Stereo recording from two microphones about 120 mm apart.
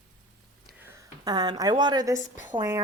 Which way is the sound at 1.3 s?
35° right (ahead or behind).